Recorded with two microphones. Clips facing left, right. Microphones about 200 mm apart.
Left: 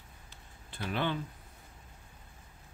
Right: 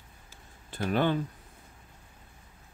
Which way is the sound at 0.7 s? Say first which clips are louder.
Right 7 dB; 45° right (ahead or behind).